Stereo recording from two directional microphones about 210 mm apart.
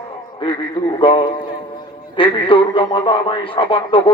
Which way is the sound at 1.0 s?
25° left (ahead or behind).